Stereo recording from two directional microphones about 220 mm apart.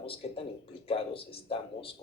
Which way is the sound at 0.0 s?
25° left (ahead or behind).